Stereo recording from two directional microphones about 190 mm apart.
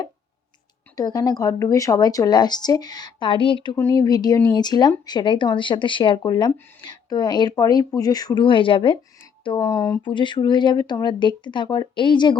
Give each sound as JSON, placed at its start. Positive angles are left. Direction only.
{"t": 0.9, "sound": "speech", "side_deg": 20}